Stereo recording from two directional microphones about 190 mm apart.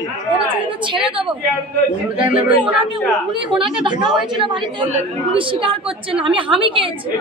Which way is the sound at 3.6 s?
25° right (ahead or behind).